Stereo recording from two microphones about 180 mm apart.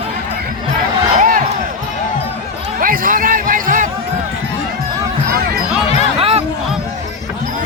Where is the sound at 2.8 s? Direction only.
50° right (ahead or behind).